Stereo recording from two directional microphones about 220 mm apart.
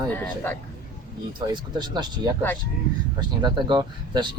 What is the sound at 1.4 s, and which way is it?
Speech, 20° right (ahead or behind).